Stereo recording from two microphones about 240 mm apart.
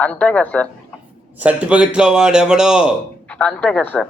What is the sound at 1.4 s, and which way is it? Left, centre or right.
A man's voice, centre.